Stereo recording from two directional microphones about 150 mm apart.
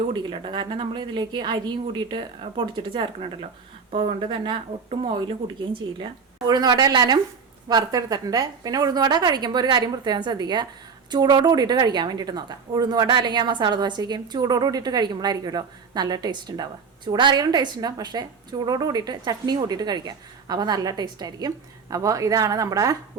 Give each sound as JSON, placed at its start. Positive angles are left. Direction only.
{"t": 0.1, "sound": "a woman's voice", "side_deg": -30}
{"t": 6.5, "sound": "a woman's voice", "side_deg": -25}